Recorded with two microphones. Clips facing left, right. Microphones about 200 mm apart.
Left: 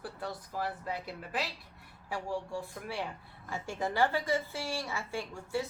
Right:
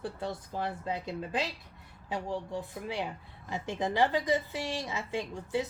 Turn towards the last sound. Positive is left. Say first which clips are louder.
# right 3 dB
turn(degrees=-20)  # may be behind; listen again after turning